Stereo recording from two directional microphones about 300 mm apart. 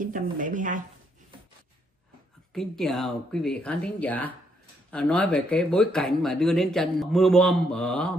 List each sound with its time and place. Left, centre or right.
0.0 s speech: right
2.5 s speech: centre